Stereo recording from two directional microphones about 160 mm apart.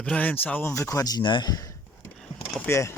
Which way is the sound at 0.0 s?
10° left (ahead or behind).